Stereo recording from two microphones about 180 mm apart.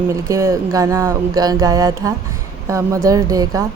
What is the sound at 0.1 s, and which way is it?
Speech, 15° right (ahead or behind).